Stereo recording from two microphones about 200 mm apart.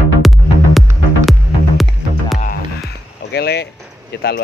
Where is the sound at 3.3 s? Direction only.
55° left (ahead or behind).